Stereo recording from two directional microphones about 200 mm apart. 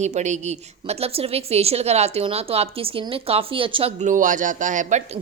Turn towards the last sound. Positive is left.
turn(degrees=-40)  # may be behind; listen again after turning